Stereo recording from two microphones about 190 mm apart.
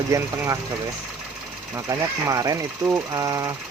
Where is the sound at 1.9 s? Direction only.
20° right (ahead or behind).